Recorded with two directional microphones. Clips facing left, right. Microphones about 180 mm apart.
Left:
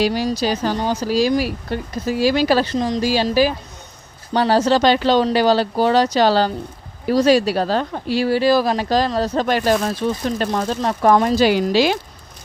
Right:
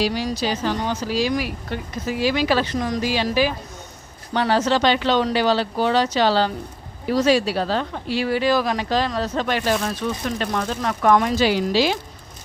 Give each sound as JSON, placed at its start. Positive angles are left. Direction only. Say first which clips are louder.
{"t": 0.0, "sound": "speech", "louder": "left 4 dB", "side_deg": 40}
{"t": 2.7, "sound": "speech", "louder": "left 4 dB", "side_deg": 25}
{"t": 4.4, "sound": "speech", "louder": "left 4 dB", "side_deg": 35}
{"t": 11.4, "sound": "speech", "louder": "left 3 dB", "side_deg": 55}